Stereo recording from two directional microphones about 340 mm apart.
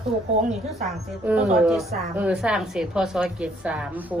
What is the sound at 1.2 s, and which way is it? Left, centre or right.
A woman's voice, centre.